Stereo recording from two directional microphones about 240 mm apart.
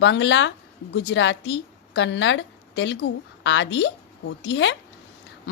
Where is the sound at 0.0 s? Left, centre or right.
Left.